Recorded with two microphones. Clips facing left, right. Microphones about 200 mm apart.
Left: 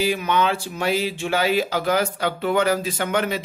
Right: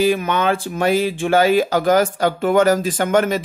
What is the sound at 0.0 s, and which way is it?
Speech, 50° right (ahead or behind).